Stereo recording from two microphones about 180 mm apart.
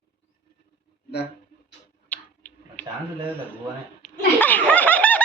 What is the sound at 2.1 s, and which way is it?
Tick-tock, 10° left (ahead or behind).